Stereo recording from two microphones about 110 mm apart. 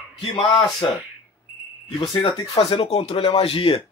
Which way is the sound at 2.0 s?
55° left (ahead or behind).